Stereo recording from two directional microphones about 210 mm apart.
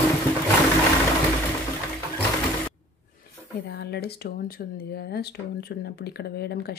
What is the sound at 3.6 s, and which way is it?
Speech, 50° left (ahead or behind).